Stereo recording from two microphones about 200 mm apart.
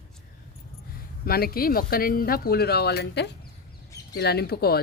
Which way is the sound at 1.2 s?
50° left (ahead or behind).